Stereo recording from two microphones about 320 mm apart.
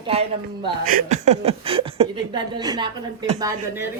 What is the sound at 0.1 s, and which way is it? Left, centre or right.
Speech, centre.